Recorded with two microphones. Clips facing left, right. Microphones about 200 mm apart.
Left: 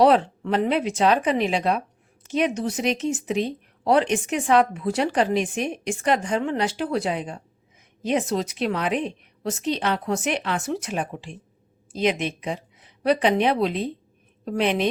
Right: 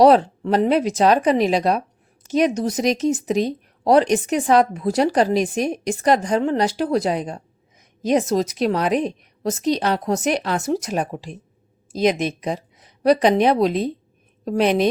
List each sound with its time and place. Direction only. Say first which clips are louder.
0.0 s speech: right 4 dB; 40° right (ahead or behind)